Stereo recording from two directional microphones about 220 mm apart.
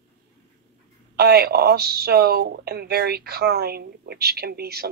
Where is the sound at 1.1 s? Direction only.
45° right (ahead or behind).